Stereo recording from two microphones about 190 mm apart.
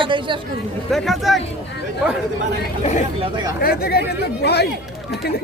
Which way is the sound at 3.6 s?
55° left (ahead or behind).